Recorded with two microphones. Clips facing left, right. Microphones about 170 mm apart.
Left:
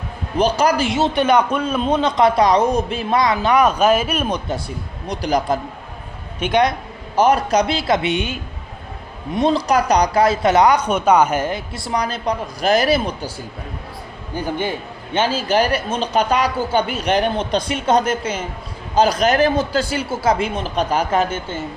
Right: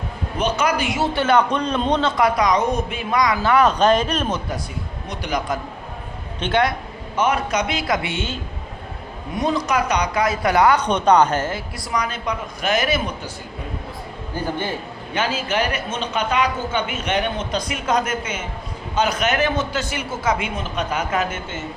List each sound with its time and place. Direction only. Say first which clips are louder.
0.3 s a man's voice: left 4 dB; 35° left (ahead or behind); by 4.4 s 10° left (ahead or behind)
5.0 s speech: left 6 dB; 35° left (ahead or behind)
6.4 s a man's voice: left 3 dB; 15° left (ahead or behind)
7.2 s a man's voice: left 5 dB; 35° left (ahead or behind); by 8.4 s 15° left (ahead or behind)
9.3 s a man's voice: left 4 dB; 30° left (ahead or behind)
10.8 s a man's voice: left 1 dB; 5° left (ahead or behind); by 13.3 s 35° left (ahead or behind)
14.3 s a man's voice: left 3 dB; 15° left (ahead or behind)
15.1 s speech: left 5 dB; 30° left (ahead or behind)